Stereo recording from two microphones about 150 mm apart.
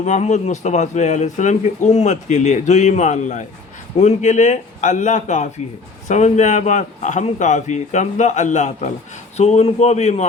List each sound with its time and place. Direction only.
0.0 s a man's voice: 50° left (ahead or behind)